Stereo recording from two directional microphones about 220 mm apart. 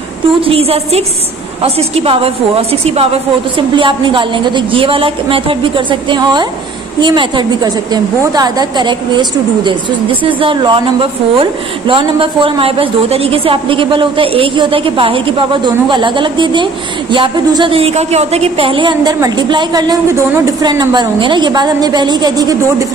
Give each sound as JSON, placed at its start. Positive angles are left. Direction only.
{"t": 0.5, "sound": "a woman's voice", "side_deg": -25}